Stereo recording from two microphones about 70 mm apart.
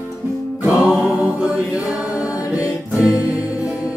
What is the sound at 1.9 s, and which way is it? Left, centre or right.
A capella, centre.